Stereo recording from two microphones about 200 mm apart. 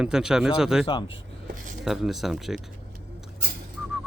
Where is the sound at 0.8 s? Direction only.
25° left (ahead or behind).